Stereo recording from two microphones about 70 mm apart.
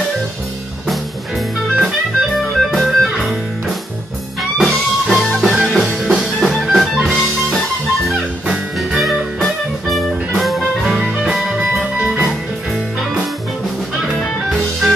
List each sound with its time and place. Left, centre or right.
0.8 s music: centre
8.5 s music: centre
11.7 s music: centre
14.1 s music: centre